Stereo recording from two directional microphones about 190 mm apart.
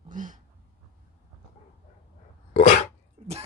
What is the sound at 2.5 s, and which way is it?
Dog, 35° left (ahead or behind).